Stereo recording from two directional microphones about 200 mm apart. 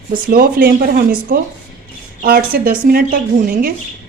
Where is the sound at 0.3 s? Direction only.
50° right (ahead or behind).